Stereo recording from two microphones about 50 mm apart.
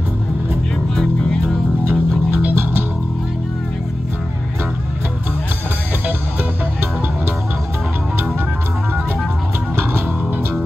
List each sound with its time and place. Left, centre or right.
0.9 s music: centre
1.9 s music: right